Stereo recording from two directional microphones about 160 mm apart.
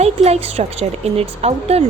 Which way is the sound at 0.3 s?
40° right (ahead or behind).